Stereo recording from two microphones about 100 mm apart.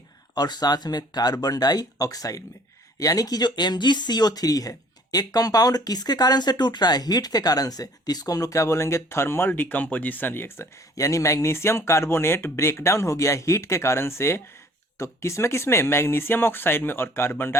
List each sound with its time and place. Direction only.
0.3 s speech: 45° left (ahead or behind); by 17.6 s 25° left (ahead or behind)